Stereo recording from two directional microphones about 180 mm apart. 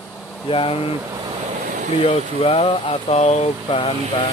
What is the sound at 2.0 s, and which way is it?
Speech, 35° left (ahead or behind).